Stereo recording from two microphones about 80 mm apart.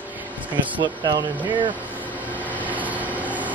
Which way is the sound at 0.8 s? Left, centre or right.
Right.